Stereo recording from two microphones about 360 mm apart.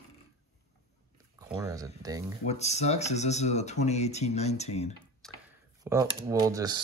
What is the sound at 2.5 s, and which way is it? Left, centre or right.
Speech, centre.